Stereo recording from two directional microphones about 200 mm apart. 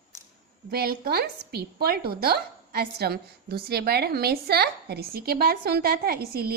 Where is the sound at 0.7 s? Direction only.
50° right (ahead or behind).